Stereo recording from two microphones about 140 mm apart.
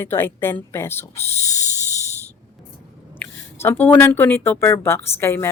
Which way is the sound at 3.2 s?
15° left (ahead or behind).